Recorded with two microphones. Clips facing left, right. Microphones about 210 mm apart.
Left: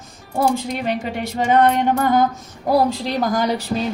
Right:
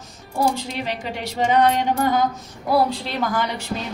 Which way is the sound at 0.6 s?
50° left (ahead or behind).